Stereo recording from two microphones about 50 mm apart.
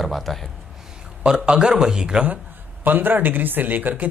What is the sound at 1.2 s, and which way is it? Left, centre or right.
Speech, centre.